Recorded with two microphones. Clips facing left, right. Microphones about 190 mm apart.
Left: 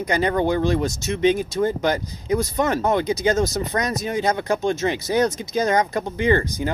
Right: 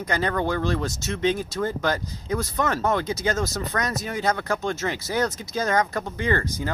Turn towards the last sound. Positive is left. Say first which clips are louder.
# left 5 dB
turn(degrees=15)  # may be behind; listen again after turning